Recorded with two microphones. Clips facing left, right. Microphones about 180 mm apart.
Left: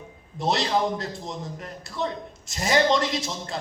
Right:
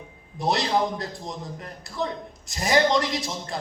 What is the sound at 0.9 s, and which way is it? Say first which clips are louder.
A man's voice: left 1 dB; 20° left (ahead or behind).